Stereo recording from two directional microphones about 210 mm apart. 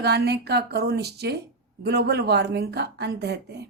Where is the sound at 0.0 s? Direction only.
50° right (ahead or behind).